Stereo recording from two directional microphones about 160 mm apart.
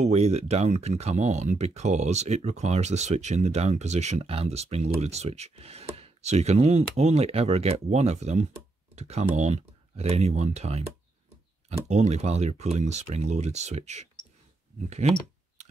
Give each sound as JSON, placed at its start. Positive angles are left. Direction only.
{"t": 0.0, "sound": "speech", "side_deg": -40}
{"t": 11.9, "sound": "speech", "side_deg": -45}